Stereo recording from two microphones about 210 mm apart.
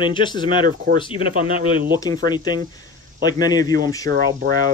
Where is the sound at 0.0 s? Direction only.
20° left (ahead or behind).